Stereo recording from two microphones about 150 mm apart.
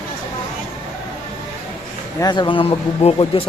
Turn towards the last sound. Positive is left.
turn(degrees=40)  # may be behind; listen again after turning